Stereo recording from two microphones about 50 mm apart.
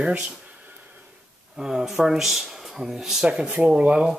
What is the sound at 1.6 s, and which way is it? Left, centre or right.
Speech, centre.